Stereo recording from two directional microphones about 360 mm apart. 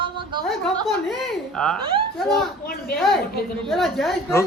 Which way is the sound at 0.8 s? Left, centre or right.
Centre.